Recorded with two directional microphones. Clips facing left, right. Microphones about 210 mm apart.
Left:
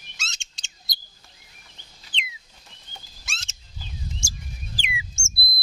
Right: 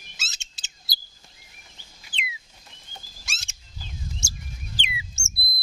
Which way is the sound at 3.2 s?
10° right (ahead or behind).